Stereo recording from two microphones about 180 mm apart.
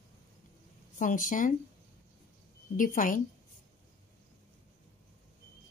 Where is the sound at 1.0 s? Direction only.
45° left (ahead or behind).